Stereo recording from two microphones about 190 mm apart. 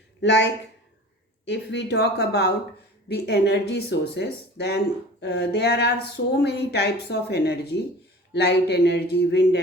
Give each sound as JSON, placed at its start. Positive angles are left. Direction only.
{"t": 0.2, "sound": "speech", "side_deg": 70}